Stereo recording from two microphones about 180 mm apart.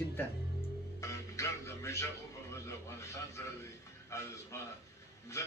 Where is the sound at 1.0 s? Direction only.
15° left (ahead or behind).